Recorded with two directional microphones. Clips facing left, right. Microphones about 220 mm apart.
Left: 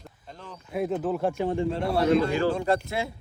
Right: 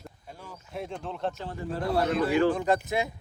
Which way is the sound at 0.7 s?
5° left (ahead or behind).